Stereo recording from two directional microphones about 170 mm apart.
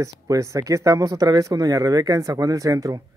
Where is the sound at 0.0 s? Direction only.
20° right (ahead or behind).